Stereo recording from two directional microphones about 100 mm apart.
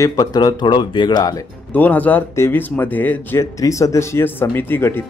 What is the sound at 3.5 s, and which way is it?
Speech, 35° left (ahead or behind).